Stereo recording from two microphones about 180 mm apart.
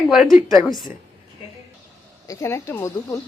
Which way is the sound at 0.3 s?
45° left (ahead or behind).